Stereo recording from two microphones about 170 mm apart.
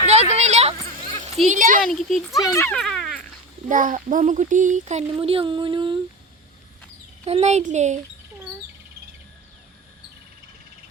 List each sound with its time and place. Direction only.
0.0 s a sound: 40° right (ahead or behind)
1.5 s a child's voice: 50° right (ahead or behind)
1.9 s speech: centre (ahead or behind)
2.4 s speech: 15° left (ahead or behind)
2.7 s dog: centre (ahead or behind)
3.7 s a child's voice: 50° right (ahead or behind); by 6.0 s 30° right (ahead or behind)
7.3 s a child's voice: 40° right (ahead or behind)